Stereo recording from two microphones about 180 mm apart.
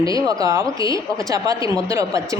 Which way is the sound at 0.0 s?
20° right (ahead or behind).